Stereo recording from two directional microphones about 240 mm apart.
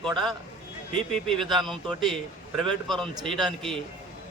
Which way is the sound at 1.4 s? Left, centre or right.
Centre.